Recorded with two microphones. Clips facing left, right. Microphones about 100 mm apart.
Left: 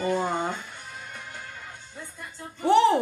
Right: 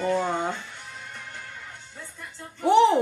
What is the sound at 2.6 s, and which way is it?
Speech, 20° right (ahead or behind).